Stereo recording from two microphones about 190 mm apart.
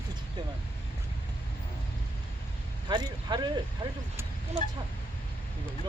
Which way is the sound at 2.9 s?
25° right (ahead or behind).